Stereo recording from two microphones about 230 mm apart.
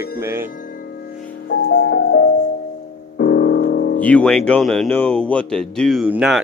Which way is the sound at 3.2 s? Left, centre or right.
Left.